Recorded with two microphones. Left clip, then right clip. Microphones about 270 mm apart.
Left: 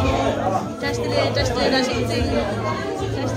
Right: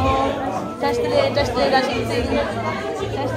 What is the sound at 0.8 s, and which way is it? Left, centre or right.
Speech, centre.